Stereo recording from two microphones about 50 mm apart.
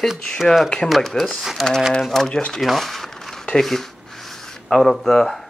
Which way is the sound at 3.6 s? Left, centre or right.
Centre.